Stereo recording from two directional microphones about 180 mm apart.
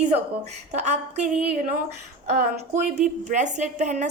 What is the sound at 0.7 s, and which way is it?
A woman's voice, 40° right (ahead or behind).